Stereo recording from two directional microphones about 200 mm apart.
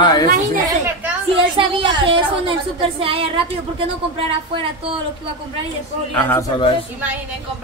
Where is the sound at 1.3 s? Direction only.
25° right (ahead or behind).